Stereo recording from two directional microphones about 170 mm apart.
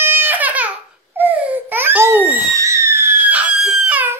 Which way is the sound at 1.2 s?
10° right (ahead or behind).